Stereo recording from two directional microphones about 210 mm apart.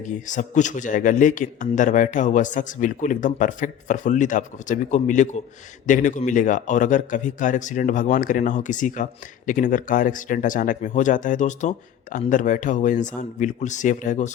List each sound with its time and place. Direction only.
0.0 s a man's voice: 35° left (ahead or behind)